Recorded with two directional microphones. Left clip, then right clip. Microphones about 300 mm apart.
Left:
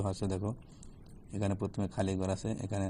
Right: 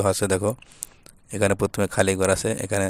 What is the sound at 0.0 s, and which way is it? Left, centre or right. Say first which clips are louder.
Speech: right 15 dB; right.